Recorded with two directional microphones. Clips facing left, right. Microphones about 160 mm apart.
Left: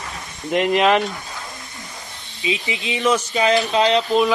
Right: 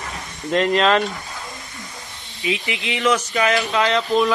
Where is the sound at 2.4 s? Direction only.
20° left (ahead or behind).